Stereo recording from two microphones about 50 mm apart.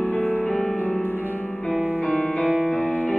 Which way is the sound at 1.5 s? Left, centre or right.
Left.